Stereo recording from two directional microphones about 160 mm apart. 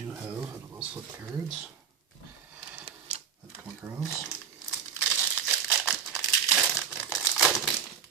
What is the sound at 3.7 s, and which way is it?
Speech, 15° right (ahead or behind).